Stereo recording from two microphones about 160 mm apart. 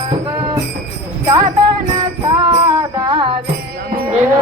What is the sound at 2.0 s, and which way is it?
Music, 25° right (ahead or behind).